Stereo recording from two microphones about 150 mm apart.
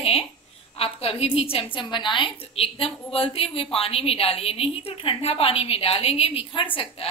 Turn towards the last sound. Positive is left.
turn(degrees=35)  # may be behind; listen again after turning